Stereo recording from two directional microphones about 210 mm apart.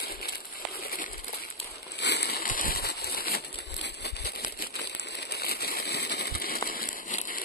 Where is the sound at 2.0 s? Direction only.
55° left (ahead or behind).